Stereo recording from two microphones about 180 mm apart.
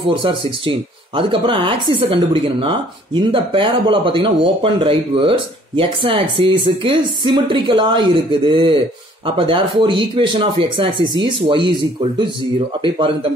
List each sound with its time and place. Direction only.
0.1 s speech: 30° right (ahead or behind)